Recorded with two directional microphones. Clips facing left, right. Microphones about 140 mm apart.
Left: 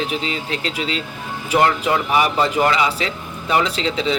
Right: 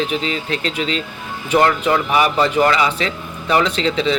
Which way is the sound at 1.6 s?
20° left (ahead or behind).